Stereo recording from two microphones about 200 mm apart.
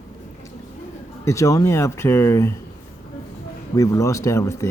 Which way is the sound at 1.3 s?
15° left (ahead or behind).